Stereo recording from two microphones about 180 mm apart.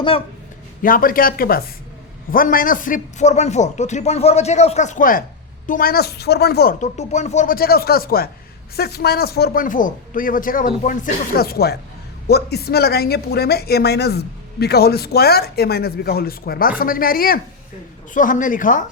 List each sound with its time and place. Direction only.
0.8 s a man's voice: 50° left (ahead or behind)
6.7 s a woman's voice: 40° left (ahead or behind)